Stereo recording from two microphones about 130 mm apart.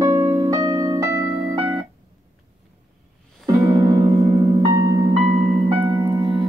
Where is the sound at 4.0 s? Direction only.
50° right (ahead or behind).